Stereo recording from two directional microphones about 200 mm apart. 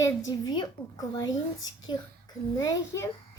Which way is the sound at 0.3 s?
20° left (ahead or behind).